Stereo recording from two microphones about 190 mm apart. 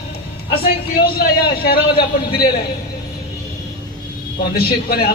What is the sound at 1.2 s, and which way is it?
A man's voice, 55° left (ahead or behind).